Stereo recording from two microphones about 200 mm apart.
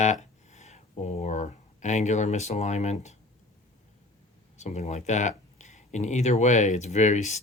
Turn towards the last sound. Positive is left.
turn(degrees=35)  # may be behind; listen again after turning